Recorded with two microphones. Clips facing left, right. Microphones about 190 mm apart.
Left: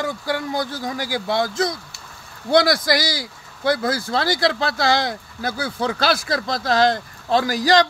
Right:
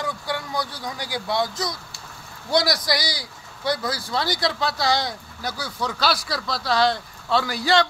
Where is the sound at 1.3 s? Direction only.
50° left (ahead or behind).